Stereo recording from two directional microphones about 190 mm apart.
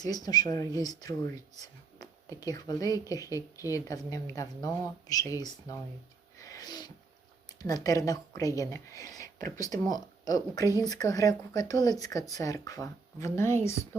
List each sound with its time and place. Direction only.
0.0 s speech: 20° left (ahead or behind)
6.3 s a sound: 20° left (ahead or behind)
7.6 s speech: 20° left (ahead or behind)